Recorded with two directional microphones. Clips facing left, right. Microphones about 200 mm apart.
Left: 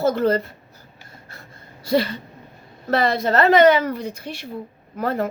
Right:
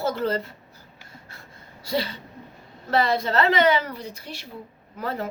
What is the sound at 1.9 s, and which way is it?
A woman's voice, 50° left (ahead or behind).